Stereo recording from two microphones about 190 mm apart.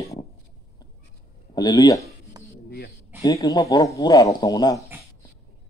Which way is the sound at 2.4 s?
20° right (ahead or behind).